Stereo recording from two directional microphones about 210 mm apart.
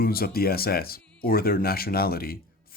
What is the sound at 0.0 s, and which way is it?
Speech, 45° left (ahead or behind).